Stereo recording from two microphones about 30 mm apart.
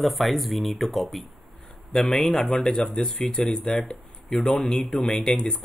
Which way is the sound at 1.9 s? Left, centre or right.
Left.